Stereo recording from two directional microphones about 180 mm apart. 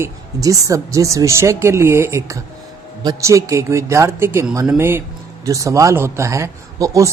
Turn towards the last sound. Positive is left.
turn(degrees=-20)  # may be behind; listen again after turning